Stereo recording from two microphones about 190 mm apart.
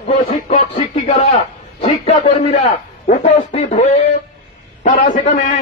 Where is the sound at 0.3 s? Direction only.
35° left (ahead or behind).